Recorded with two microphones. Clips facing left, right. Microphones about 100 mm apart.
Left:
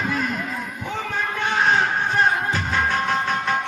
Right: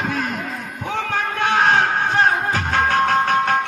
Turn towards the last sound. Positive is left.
turn(degrees=-65)  # may be behind; listen again after turning